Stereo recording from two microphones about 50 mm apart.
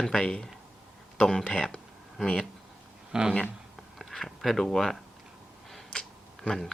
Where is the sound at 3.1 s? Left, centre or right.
Centre.